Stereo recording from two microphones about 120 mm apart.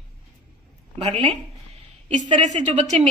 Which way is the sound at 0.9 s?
65° right (ahead or behind).